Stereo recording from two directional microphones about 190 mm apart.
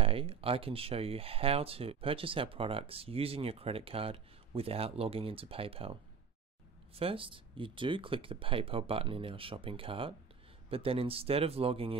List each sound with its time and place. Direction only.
0.0 s speech: 30° right (ahead or behind)
7.0 s speech: 30° right (ahead or behind)